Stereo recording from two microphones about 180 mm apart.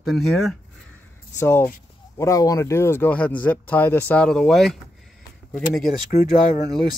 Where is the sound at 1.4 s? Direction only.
15° left (ahead or behind).